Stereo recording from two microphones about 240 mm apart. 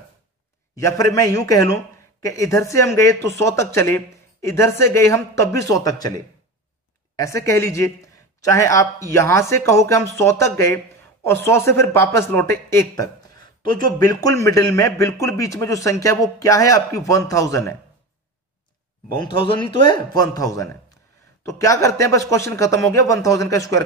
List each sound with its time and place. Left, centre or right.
0.7 s a man's voice: centre
19.4 s speech: left